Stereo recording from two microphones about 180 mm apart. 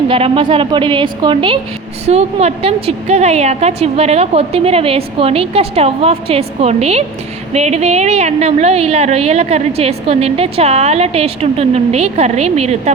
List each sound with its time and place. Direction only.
0.1 s a woman's voice: 30° right (ahead or behind)